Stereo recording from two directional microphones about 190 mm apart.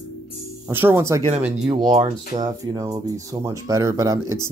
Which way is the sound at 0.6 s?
10° right (ahead or behind).